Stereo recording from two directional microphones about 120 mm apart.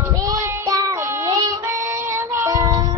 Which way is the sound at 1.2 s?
30° right (ahead or behind).